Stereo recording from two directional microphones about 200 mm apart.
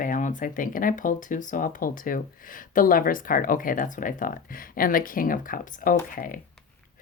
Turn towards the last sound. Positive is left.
turn(degrees=45)  # may be behind; listen again after turning